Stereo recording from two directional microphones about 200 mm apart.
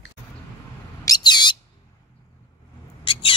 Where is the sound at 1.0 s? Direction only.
20° left (ahead or behind).